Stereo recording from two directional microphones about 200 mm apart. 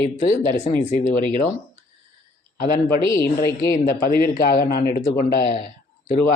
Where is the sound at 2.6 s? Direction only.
45° left (ahead or behind).